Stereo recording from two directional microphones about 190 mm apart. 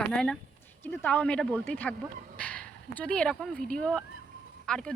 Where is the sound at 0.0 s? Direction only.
5° left (ahead or behind).